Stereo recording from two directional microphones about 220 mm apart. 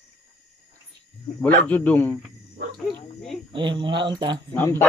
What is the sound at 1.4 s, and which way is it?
Speech, 5° left (ahead or behind).